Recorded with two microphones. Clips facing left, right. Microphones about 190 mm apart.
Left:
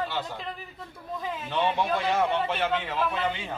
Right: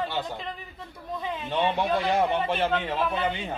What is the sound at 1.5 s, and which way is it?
A man's voice, 20° right (ahead or behind).